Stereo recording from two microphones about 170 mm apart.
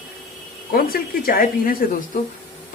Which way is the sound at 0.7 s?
60° left (ahead or behind).